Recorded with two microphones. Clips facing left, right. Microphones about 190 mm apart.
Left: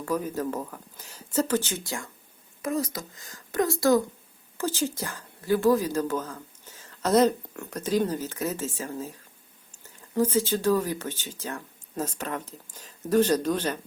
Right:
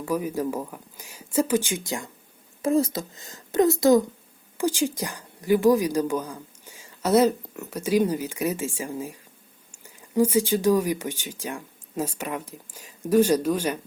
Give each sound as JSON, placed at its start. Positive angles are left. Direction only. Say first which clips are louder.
{"t": 0.0, "sound": "a woman's voice", "louder": "right 2 dB", "side_deg": -10}
{"t": 2.6, "sound": "a woman's voice", "louder": "right 7 dB", "side_deg": -25}